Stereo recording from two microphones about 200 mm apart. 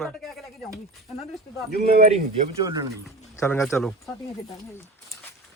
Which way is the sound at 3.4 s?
15° left (ahead or behind).